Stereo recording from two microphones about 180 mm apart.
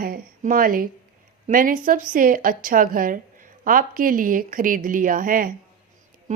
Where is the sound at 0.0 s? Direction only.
50° right (ahead or behind).